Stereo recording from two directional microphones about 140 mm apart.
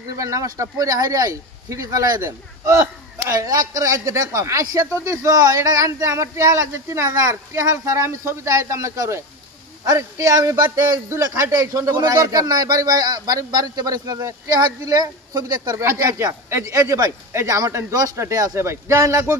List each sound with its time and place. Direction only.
0.1 s a man's voice: 20° right (ahead or behind)